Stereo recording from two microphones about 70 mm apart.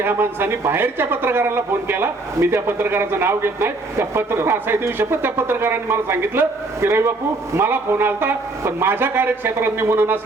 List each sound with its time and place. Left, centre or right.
0.0 s a man's voice: right